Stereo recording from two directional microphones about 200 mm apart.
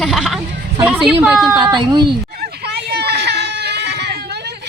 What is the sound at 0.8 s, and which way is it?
Speech, 5° right (ahead or behind).